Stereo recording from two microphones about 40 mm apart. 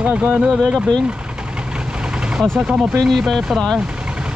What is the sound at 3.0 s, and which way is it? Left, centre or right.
Speech, centre.